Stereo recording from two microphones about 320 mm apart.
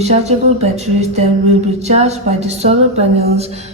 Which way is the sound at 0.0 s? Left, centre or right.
Centre.